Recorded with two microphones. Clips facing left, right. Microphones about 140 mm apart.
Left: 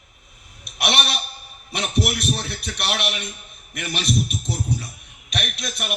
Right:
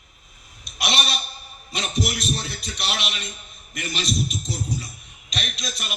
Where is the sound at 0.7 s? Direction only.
60° left (ahead or behind).